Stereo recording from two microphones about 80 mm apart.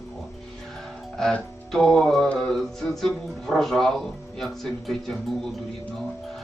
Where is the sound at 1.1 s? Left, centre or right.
Centre.